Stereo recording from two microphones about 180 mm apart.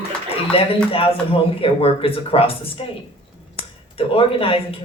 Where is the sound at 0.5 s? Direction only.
30° left (ahead or behind).